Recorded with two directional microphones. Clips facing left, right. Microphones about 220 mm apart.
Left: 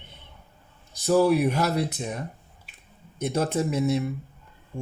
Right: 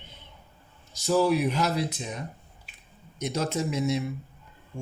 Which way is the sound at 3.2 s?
55° left (ahead or behind).